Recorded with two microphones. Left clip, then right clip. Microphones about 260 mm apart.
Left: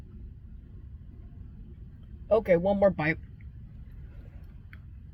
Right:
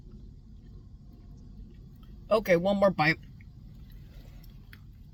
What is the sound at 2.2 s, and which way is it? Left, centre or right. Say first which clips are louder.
Speech: left 1 dB; centre.